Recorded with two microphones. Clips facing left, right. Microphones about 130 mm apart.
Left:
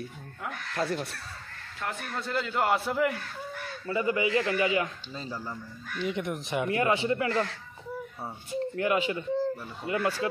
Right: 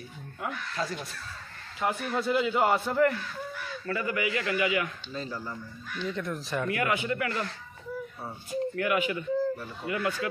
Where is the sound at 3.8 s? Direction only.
25° left (ahead or behind).